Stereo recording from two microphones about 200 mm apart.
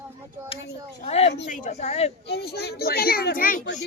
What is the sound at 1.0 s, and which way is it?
Speech, 30° left (ahead or behind).